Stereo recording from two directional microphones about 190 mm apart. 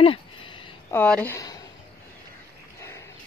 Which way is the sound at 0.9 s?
10° left (ahead or behind).